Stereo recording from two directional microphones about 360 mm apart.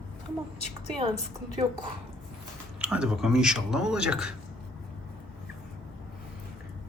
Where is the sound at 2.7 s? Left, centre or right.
Centre.